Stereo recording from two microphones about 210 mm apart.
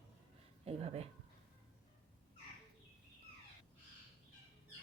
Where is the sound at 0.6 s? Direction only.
30° right (ahead or behind).